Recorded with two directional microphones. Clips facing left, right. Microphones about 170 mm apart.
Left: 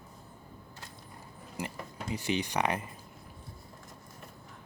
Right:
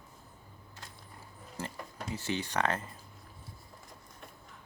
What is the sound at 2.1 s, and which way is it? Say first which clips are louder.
Speech: left 2 dB; 15° left (ahead or behind).